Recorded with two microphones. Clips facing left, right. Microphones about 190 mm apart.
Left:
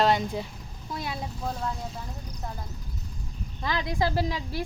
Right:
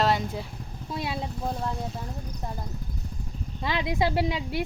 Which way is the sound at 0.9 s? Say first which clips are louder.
Right 2 dB; 25° right (ahead or behind).